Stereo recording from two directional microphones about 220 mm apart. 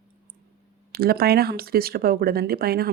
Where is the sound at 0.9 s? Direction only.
45° right (ahead or behind).